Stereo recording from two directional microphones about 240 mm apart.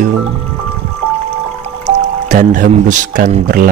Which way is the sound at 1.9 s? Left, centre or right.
Right.